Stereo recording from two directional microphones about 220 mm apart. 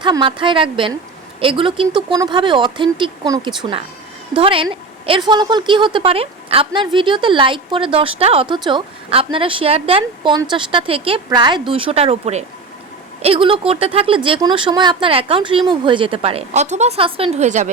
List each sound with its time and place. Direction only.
0.0 s a woman's voice: 20° right (ahead or behind)